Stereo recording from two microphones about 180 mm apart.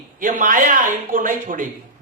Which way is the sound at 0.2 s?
45° right (ahead or behind).